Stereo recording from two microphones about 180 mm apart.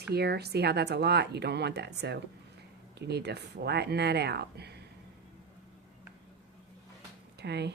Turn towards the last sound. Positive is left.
turn(degrees=-70)  # may be behind; listen again after turning